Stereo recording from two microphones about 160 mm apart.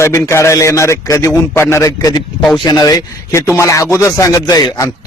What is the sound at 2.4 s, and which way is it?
Speech, centre (ahead or behind).